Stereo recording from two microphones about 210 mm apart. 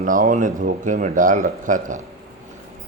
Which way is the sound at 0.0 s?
40° right (ahead or behind).